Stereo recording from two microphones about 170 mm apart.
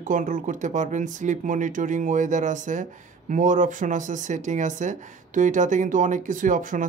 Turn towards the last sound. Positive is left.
turn(degrees=-50)  # may be behind; listen again after turning